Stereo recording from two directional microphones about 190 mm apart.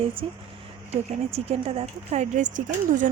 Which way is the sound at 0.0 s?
30° right (ahead or behind).